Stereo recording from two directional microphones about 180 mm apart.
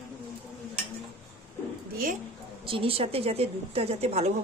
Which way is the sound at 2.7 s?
30° right (ahead or behind).